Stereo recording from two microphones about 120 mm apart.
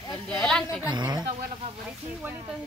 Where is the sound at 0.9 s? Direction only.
35° right (ahead or behind).